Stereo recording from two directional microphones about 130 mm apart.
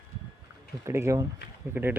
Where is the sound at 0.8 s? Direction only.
20° right (ahead or behind).